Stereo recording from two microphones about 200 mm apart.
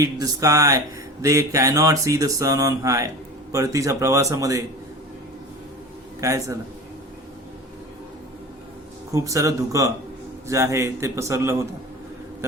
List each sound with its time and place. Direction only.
0.0 s speech: 20° right (ahead or behind)
6.1 s speech: 15° right (ahead or behind)
9.1 s speech: 15° right (ahead or behind)